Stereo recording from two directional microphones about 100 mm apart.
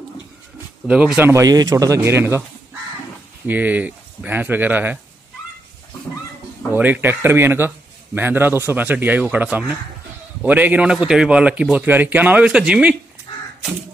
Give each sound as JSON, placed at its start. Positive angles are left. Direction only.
{"t": 0.8, "sound": "speech", "side_deg": -10}
{"t": 1.2, "sound": "speech", "side_deg": -30}
{"t": 3.4, "sound": "speech", "side_deg": -15}
{"t": 6.7, "sound": "a man's voice", "side_deg": -20}
{"t": 13.3, "sound": "crow", "side_deg": 60}